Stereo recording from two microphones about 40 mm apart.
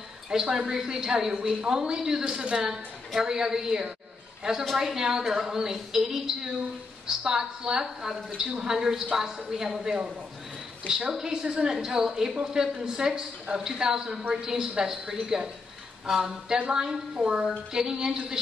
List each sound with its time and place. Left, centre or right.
0.3 s a woman's voice: centre
11.1 s a woman's voice: centre
16.5 s a woman's voice: right
17.7 s a woman's voice: centre